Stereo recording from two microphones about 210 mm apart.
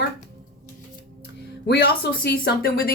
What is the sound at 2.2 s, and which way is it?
Speech, 45° left (ahead or behind).